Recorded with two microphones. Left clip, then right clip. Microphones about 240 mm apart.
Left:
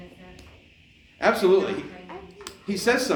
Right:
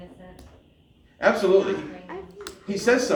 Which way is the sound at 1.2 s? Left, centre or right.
Left.